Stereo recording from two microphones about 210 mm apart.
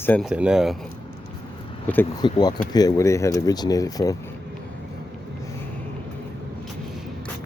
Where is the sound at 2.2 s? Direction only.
20° left (ahead or behind).